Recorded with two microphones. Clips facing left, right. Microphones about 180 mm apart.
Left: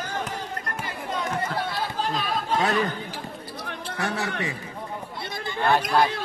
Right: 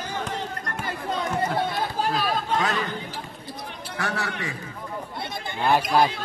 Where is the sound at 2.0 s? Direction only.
5° right (ahead or behind).